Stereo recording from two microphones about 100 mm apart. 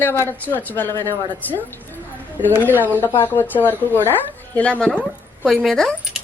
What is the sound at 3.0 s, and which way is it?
A woman's voice, 20° left (ahead or behind).